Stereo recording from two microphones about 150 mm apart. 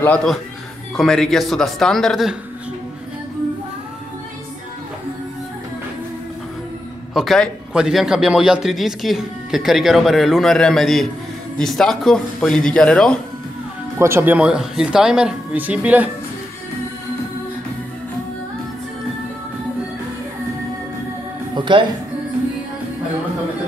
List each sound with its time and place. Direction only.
0.0 s a man's voice: 5° left (ahead or behind)
7.2 s a man's voice: centre (ahead or behind)
13.9 s speech: 15° right (ahead or behind)
21.5 s music: 30° right (ahead or behind)